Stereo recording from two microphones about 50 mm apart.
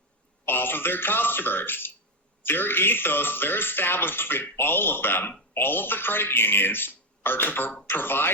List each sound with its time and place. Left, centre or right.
0.4 s speech: left